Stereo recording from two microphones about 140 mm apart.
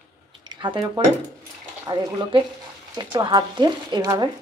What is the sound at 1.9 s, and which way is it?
Speech, 30° right (ahead or behind).